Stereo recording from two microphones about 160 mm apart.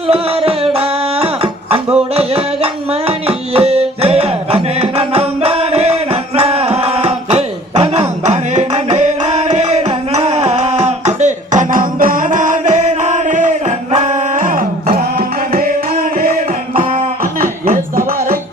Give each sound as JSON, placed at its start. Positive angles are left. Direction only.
{"t": 0.1, "sound": "music", "side_deg": -40}
{"t": 16.1, "sound": "a sound", "side_deg": -65}
{"t": 16.7, "sound": "beatboxing", "side_deg": -35}
{"t": 17.4, "sound": "music", "side_deg": -55}